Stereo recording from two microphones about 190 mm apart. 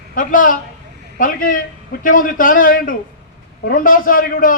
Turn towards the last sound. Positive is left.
turn(degrees=45)  # may be behind; listen again after turning